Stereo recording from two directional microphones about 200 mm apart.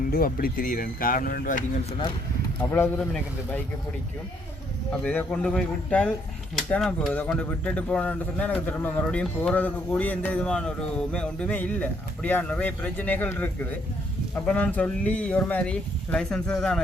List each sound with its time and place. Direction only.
0.1 s speech: 45° left (ahead or behind)
2.6 s speech: 10° left (ahead or behind)
4.9 s speech: 5° left (ahead or behind)